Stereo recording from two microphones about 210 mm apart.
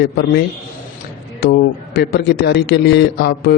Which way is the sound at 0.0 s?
50° left (ahead or behind).